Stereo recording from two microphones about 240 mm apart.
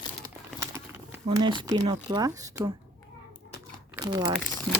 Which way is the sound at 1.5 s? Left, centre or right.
Centre.